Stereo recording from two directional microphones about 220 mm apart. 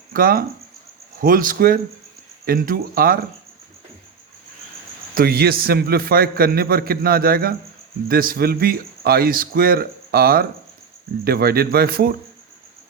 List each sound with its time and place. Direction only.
0.1 s speech: 40° right (ahead or behind)
5.1 s a man's voice: 45° right (ahead or behind)